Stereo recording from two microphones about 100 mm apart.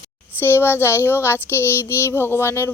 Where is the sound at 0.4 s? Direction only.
25° left (ahead or behind).